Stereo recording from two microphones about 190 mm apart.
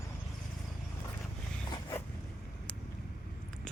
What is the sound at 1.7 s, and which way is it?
Zipper, 15° left (ahead or behind).